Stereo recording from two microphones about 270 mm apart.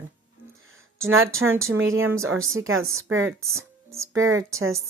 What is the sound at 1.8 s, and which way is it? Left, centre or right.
A woman's voice, right.